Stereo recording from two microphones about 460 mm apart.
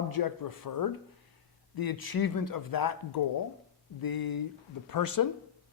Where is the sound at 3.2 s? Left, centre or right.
Left.